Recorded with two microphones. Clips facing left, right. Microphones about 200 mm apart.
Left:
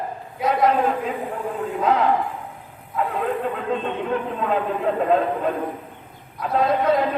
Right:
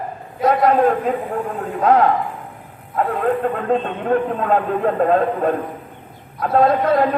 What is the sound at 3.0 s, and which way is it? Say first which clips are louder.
A man's voice: right 5 dB; 50° right (ahead or behind).